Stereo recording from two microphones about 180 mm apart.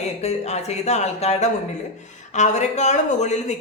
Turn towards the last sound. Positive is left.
turn(degrees=40)  # may be behind; listen again after turning